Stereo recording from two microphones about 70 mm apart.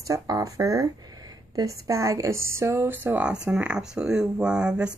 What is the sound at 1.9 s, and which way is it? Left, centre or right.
Speech, right.